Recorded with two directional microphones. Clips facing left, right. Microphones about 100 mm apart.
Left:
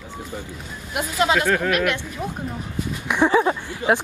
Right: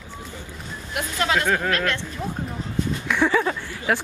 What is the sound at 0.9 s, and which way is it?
Speech, 20° left (ahead or behind).